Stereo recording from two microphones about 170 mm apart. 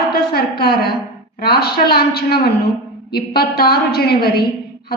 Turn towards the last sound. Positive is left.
turn(degrees=70)  # may be behind; listen again after turning